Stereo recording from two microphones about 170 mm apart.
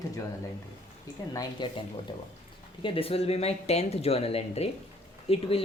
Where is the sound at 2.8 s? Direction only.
35° left (ahead or behind).